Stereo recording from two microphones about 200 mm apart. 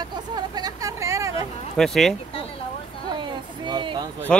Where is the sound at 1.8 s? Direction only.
Centre (ahead or behind).